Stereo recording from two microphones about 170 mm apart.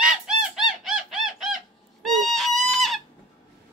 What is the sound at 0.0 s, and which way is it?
Bird, centre (ahead or behind).